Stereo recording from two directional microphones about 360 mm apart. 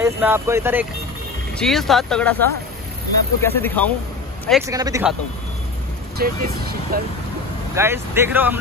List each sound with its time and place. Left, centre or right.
0.0 s speech: centre
3.4 s speech: centre
6.1 s speech: right
7.7 s speech: centre